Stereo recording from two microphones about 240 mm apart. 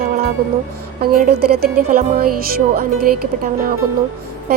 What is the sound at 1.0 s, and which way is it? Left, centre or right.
Speech, right.